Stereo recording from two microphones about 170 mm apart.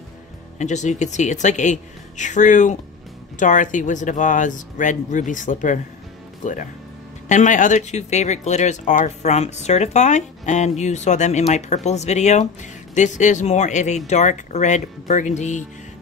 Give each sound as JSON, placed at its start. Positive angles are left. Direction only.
{"t": 0.6, "sound": "speech", "side_deg": 45}